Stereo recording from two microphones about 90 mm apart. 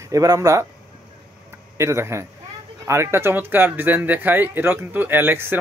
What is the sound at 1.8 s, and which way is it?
Speech, 30° right (ahead or behind).